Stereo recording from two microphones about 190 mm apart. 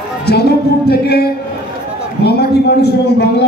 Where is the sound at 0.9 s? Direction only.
55° left (ahead or behind).